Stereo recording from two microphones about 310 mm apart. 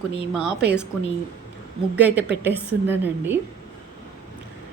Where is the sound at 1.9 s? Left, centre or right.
Centre.